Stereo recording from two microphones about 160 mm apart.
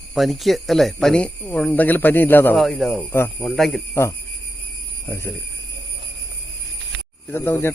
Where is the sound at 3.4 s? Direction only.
Centre (ahead or behind).